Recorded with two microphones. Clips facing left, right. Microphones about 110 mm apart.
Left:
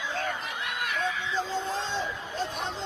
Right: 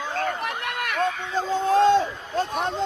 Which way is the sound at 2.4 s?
55° right (ahead or behind).